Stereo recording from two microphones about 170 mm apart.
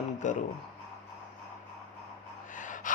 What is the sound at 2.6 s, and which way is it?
Gasp, 50° left (ahead or behind).